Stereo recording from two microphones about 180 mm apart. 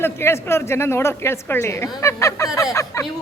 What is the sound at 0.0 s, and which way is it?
Speech, 15° left (ahead or behind).